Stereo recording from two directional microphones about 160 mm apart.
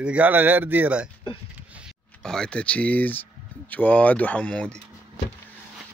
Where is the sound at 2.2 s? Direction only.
5° left (ahead or behind).